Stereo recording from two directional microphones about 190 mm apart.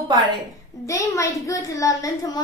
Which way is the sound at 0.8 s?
15° left (ahead or behind).